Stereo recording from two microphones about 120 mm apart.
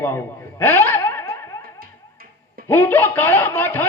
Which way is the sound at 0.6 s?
15° left (ahead or behind).